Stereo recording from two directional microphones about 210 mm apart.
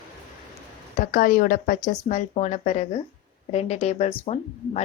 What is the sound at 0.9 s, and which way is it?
Speech, 40° left (ahead or behind).